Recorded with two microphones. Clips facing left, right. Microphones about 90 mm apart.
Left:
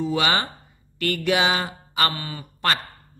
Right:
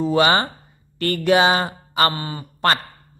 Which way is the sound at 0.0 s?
40° right (ahead or behind).